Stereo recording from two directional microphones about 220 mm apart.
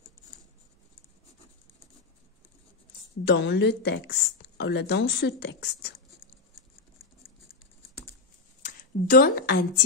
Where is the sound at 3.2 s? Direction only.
50° left (ahead or behind).